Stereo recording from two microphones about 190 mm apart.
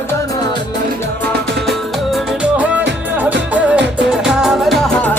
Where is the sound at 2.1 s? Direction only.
5° right (ahead or behind).